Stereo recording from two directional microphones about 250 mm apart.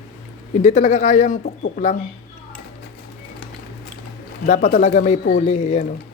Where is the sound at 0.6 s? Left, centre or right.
Left.